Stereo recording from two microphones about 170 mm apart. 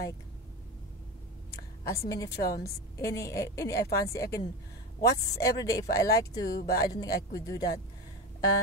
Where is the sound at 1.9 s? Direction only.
20° left (ahead or behind).